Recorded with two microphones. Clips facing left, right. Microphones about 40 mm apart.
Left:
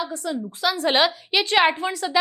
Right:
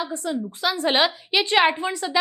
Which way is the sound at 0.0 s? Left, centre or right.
Centre.